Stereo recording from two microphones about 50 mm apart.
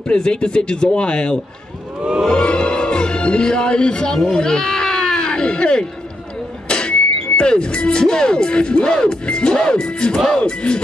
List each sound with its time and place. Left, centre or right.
0.0 s speech: centre
2.2 s music: centre
6.7 s speech: centre
10.3 s music: centre